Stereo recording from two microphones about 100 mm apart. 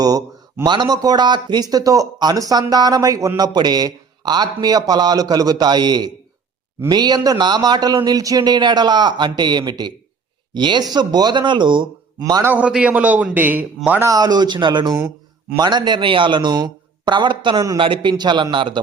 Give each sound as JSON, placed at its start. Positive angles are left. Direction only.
{"t": 0.0, "sound": "a man's voice", "side_deg": -40}
{"t": 12.2, "sound": "a man's voice", "side_deg": -35}
{"t": 12.5, "sound": "a man's voice", "side_deg": -10}
{"t": 14.0, "sound": "a man's voice", "side_deg": -40}